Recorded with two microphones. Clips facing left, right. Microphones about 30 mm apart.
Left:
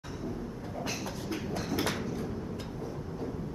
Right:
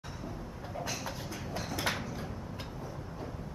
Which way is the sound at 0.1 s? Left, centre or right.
Centre.